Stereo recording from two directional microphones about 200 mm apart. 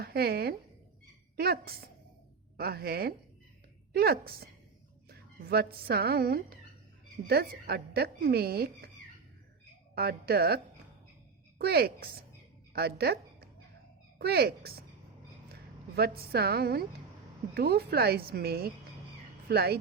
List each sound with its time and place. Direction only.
0.0 s speech: 50° right (ahead or behind)
9.9 s speech: 50° right (ahead or behind)
16.0 s speech: 50° right (ahead or behind)